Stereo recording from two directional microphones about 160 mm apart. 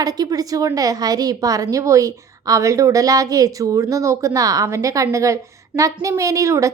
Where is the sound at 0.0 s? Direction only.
25° right (ahead or behind).